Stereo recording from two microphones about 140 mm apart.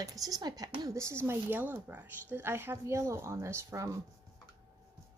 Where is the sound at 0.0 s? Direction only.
25° right (ahead or behind).